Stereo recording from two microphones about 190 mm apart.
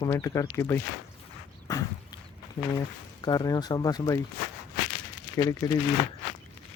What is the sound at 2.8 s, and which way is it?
Speech, 20° left (ahead or behind).